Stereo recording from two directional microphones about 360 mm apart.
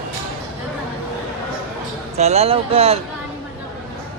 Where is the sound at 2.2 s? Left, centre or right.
Centre.